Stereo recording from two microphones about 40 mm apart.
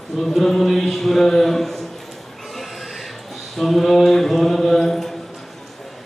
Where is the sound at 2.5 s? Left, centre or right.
Centre.